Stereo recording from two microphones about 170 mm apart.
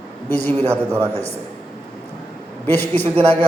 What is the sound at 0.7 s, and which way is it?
Speech, 15° right (ahead or behind).